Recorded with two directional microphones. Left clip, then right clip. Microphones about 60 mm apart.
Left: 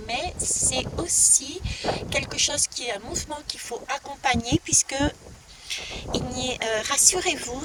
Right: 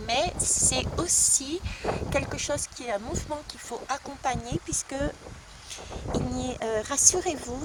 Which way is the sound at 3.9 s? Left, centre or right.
Left.